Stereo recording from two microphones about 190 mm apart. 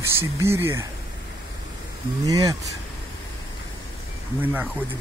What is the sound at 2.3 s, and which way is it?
Speech, 20° right (ahead or behind).